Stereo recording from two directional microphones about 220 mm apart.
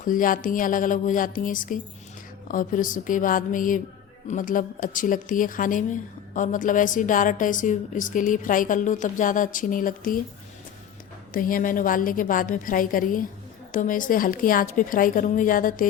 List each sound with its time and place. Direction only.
0.0 s speech: 40° left (ahead or behind)
11.3 s speech: 40° left (ahead or behind)